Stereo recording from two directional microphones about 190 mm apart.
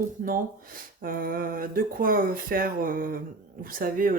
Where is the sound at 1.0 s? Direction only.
50° right (ahead or behind).